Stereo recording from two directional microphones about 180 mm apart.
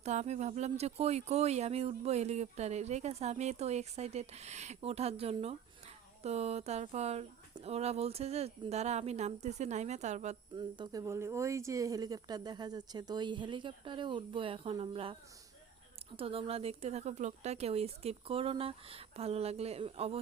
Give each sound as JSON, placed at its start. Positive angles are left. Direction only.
{"t": 0.0, "sound": "speech", "side_deg": -40}
{"t": 10.6, "sound": "speech", "side_deg": -20}
{"t": 16.1, "sound": "speech", "side_deg": -30}